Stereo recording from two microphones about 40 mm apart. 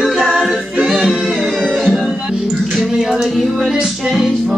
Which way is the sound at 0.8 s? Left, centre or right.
Centre.